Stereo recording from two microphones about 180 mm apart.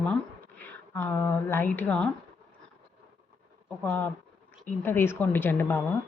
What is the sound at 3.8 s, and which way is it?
Speech, 10° left (ahead or behind).